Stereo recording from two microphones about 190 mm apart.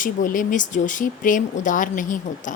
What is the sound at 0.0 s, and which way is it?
A woman's voice, 45° left (ahead or behind).